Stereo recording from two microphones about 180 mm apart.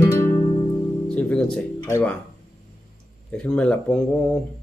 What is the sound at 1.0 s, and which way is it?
Speech, 5° left (ahead or behind).